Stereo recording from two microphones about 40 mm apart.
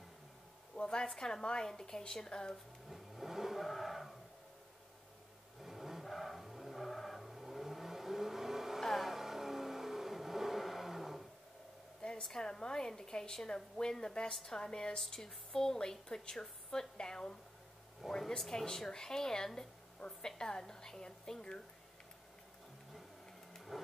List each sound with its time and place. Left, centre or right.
0.7 s a woman's voice: left
2.9 s vehicle: centre
3.6 s a sound: centre
5.6 s vehicle: centre
12.0 s a sound: left
12.4 s a woman's voice: centre
18.0 s a woman's voice: centre
18.4 s a woman's voice: centre
18.7 s a woman's voice: centre
23.5 s printer: centre